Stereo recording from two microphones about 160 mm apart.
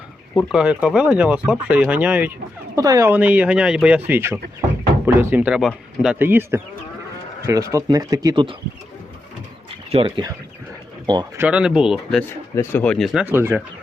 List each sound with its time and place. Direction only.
0.3 s speech: 5° right (ahead or behind)
2.7 s speech: 20° right (ahead or behind)
3.1 s speech: 10° right (ahead or behind); by 8.5 s 25° right (ahead or behind)
9.9 s speech: 35° right (ahead or behind)
11.3 s speech: 5° right (ahead or behind)
12.5 s speech: 10° left (ahead or behind)
13.2 s speech: 15° right (ahead or behind)